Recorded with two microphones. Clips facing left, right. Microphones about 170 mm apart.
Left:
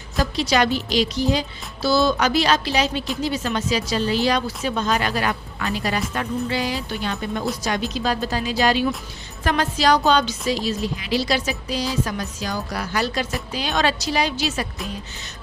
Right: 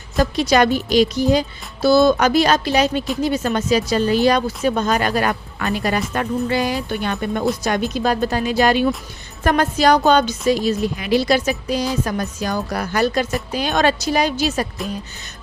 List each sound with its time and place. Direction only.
0.2 s speech: 50° right (ahead or behind)